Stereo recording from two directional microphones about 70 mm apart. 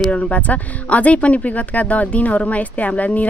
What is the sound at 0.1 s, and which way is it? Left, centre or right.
Speech, left.